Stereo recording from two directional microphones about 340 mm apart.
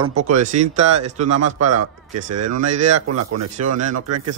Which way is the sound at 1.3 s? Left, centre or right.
Right.